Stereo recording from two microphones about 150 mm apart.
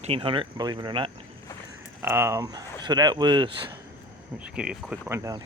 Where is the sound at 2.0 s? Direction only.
15° right (ahead or behind); by 3.7 s 30° right (ahead or behind).